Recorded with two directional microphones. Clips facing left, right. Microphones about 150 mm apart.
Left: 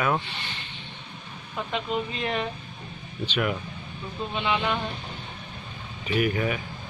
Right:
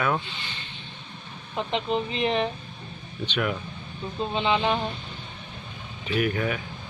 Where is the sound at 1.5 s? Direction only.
25° right (ahead or behind).